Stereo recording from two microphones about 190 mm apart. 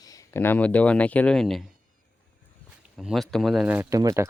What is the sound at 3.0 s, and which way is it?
Speech, centre (ahead or behind).